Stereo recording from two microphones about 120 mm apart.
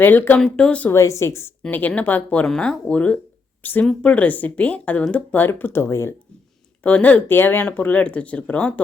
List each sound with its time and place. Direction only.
0.0 s speech: 15° left (ahead or behind)
0.9 s a woman's voice: 25° left (ahead or behind)
1.6 s speech: 10° left (ahead or behind)